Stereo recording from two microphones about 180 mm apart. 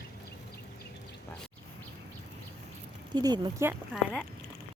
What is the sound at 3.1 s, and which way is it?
Speech, 25° right (ahead or behind).